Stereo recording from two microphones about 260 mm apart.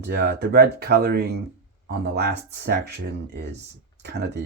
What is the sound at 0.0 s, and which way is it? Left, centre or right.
Speech, right.